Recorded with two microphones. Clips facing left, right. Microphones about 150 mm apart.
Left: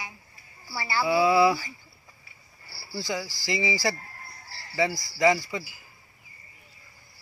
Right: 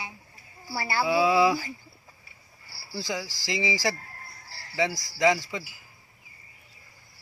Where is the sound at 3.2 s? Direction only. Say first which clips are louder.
Left 2 dB; 90° right.